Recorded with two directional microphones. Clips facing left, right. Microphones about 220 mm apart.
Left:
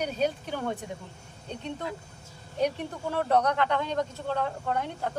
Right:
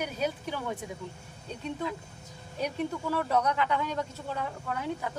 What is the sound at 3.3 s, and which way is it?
Speech, 65° left (ahead or behind).